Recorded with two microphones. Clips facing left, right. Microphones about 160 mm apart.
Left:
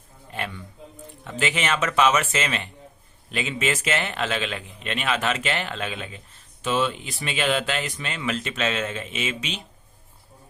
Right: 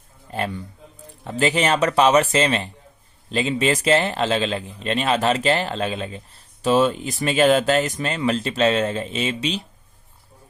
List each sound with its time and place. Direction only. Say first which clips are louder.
0.3 s a man's voice: right 6 dB; 35° right (ahead or behind)